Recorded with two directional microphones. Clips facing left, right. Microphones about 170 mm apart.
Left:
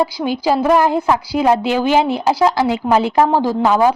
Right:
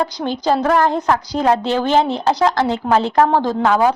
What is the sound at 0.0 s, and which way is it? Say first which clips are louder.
A woman's voice: left 2 dB; 10° left (ahead or behind).